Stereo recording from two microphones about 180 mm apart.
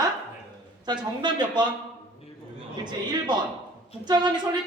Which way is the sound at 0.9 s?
25° right (ahead or behind).